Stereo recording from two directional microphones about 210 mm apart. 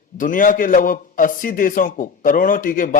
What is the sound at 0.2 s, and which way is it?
A man's voice, 40° left (ahead or behind).